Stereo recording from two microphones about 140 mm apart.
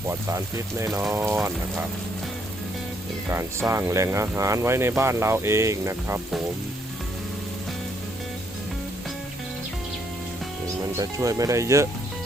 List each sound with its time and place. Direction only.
0.1 s speech: 20° right (ahead or behind)
3.2 s speech: 20° right (ahead or behind)
10.9 s speech: 20° right (ahead or behind)